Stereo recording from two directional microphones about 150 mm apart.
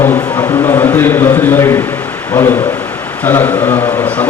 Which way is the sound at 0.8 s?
15° left (ahead or behind).